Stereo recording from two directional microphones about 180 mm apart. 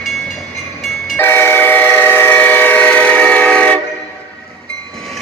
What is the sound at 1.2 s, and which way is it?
Train, 10° left (ahead or behind).